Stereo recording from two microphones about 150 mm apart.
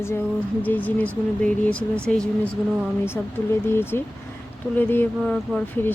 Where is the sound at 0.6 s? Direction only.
10° left (ahead or behind).